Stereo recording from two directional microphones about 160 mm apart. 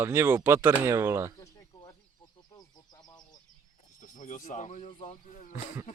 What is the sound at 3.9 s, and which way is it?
Speech, 50° left (ahead or behind).